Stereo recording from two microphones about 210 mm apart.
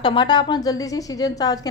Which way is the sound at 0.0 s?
20° left (ahead or behind).